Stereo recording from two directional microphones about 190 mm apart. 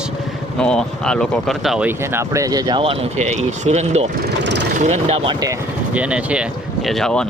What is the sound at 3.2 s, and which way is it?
Speech, 35° right (ahead or behind).